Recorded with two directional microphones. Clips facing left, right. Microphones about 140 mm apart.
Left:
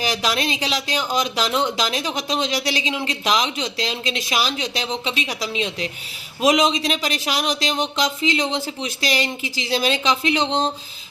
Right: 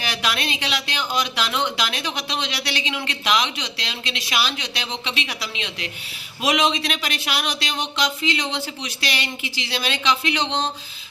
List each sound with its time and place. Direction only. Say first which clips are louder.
0.0 s speech: left 4 dB; 40° left (ahead or behind)